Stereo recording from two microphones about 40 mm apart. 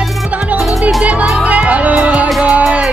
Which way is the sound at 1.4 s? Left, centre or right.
Right.